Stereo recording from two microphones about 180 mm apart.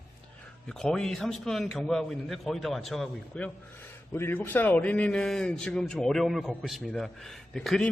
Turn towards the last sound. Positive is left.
turn(degrees=0)  # may be behind; listen again after turning